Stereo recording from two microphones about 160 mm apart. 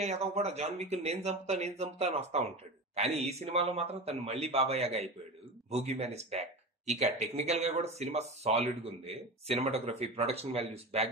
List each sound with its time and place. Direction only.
0.0 s speech: 40° right (ahead or behind)